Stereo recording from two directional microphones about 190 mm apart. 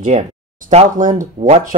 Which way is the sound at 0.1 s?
35° right (ahead or behind).